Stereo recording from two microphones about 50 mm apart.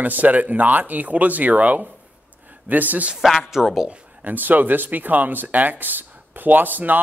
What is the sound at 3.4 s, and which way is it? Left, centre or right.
Speech, centre.